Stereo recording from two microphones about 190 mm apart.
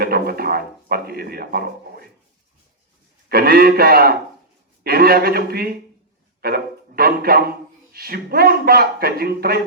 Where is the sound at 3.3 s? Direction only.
55° right (ahead or behind).